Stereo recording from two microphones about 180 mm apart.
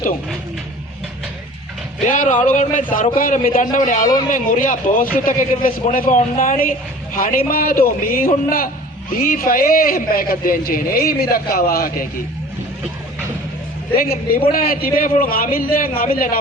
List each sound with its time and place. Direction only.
2.0 s a man's voice: 45° left (ahead or behind)
13.9 s a man's voice: 55° left (ahead or behind)